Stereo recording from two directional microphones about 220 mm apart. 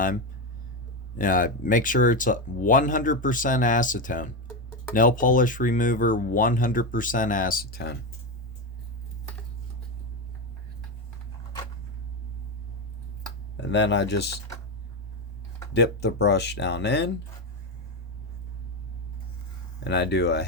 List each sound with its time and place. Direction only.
1.2 s speech: 40° left (ahead or behind)
13.6 s speech: 55° left (ahead or behind)
15.7 s speech: 50° left (ahead or behind)
19.8 s speech: 50° left (ahead or behind)